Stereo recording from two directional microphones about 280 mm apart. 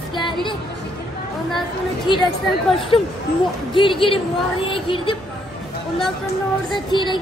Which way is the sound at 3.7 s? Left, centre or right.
Centre.